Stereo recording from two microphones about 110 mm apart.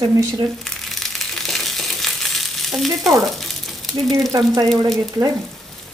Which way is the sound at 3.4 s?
5° left (ahead or behind).